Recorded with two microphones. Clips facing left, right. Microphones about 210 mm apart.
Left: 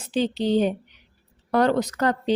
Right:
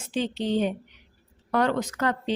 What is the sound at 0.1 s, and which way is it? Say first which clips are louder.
A woman's voice: left 4 dB; 35° left (ahead or behind).